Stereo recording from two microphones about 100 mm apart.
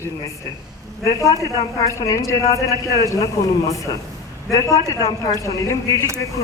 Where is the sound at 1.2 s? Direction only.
30° left (ahead or behind).